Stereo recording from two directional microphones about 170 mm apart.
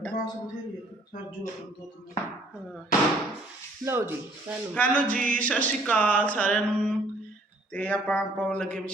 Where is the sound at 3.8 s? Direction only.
15° right (ahead or behind).